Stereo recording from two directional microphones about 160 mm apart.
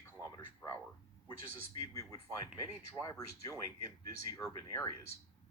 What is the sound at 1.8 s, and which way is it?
Speech, 20° left (ahead or behind).